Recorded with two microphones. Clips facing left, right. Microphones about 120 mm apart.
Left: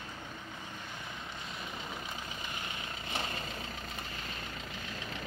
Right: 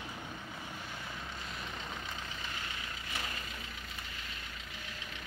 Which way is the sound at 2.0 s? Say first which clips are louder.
Left 1 dB; 15° left (ahead or behind).